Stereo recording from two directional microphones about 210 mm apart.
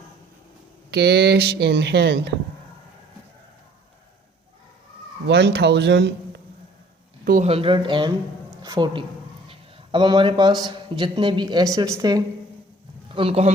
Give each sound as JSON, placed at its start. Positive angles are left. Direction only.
{"t": 0.9, "sound": "speech", "side_deg": -50}
{"t": 5.3, "sound": "speech", "side_deg": -50}
{"t": 7.4, "sound": "a man's voice", "side_deg": -25}